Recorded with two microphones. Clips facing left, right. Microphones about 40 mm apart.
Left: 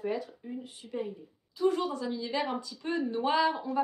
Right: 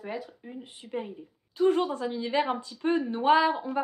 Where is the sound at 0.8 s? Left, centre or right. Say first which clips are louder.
Right 2 dB; right.